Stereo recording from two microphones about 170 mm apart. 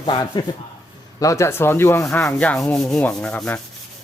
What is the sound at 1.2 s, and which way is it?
Sanding, 20° left (ahead or behind).